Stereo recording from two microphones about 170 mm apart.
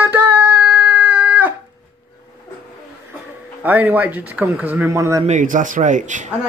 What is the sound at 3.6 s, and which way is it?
Speech, 10° right (ahead or behind).